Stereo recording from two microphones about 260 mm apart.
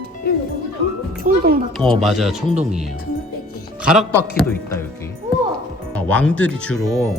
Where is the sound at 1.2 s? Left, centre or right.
Right.